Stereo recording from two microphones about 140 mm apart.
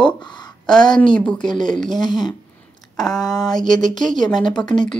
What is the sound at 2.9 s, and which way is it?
Speech, 5° left (ahead or behind).